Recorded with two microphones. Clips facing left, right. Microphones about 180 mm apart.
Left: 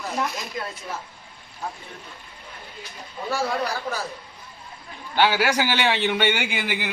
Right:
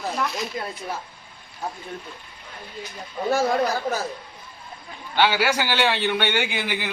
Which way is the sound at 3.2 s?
45° right (ahead or behind).